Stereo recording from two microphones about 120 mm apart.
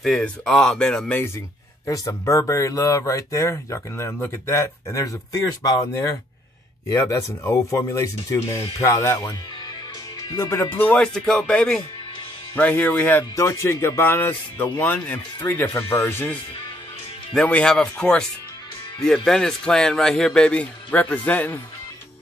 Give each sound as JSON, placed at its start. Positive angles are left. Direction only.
{"t": 0.0, "sound": "speech", "side_deg": 5}
{"t": 1.9, "sound": "speech", "side_deg": 25}
{"t": 6.9, "sound": "speech", "side_deg": 30}
{"t": 13.4, "sound": "speech", "side_deg": 25}
{"t": 17.3, "sound": "speech", "side_deg": 10}